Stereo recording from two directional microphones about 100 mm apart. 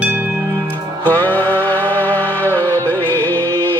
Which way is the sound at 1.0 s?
15° left (ahead or behind).